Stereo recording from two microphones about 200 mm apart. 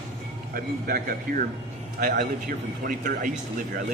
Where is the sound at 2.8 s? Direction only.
45° right (ahead or behind).